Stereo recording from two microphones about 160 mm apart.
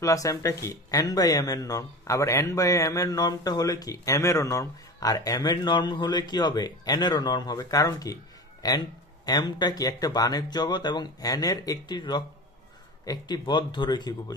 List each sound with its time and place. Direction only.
0.0 s speech: 20° left (ahead or behind)